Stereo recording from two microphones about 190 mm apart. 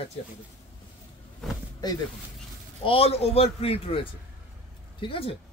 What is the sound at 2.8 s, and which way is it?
A man's voice, 30° left (ahead or behind).